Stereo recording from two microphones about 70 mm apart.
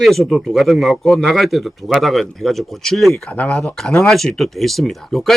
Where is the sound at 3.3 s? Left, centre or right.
Centre.